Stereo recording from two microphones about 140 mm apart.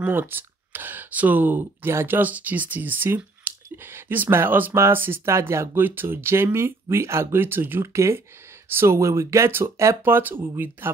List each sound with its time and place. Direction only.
0.0 s speech: 15° right (ahead or behind)